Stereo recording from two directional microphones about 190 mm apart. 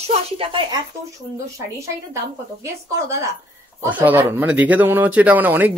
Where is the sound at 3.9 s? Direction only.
10° right (ahead or behind).